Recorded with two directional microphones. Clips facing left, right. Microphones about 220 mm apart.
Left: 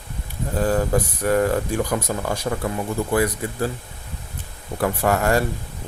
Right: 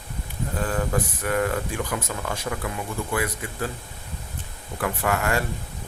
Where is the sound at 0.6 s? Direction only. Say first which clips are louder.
Left 6 dB; 35° left (ahead or behind).